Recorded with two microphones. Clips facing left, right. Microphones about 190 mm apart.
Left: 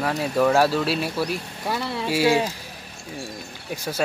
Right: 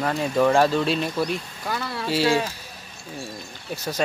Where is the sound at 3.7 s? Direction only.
10° left (ahead or behind).